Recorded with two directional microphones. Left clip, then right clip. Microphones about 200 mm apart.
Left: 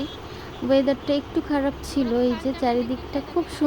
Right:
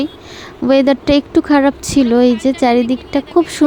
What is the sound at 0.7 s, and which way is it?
Speech, 50° right (ahead or behind).